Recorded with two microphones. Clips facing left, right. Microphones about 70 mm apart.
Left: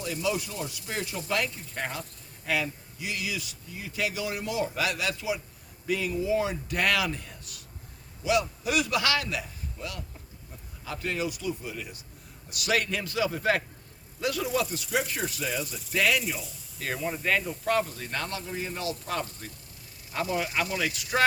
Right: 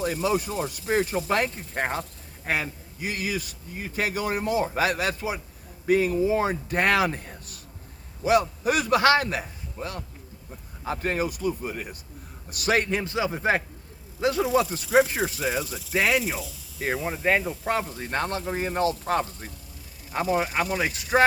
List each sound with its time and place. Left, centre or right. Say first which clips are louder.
0.0 s speech: right 5 dB; right